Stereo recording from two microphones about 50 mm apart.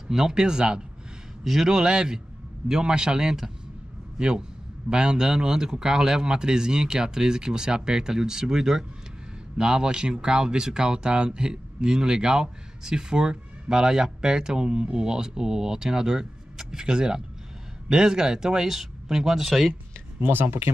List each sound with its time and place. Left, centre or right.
0.1 s speech: centre
20.2 s speech: right